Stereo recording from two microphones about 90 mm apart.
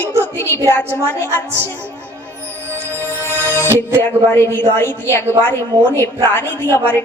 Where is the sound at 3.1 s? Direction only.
25° left (ahead or behind).